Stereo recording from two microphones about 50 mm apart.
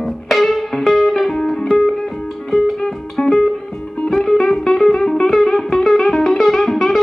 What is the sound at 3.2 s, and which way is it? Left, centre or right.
Music, centre.